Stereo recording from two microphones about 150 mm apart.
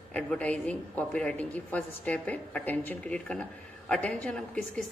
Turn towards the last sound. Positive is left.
turn(degrees=5)  # may be behind; listen again after turning